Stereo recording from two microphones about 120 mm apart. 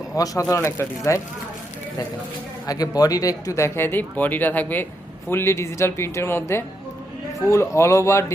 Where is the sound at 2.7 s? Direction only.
30° left (ahead or behind).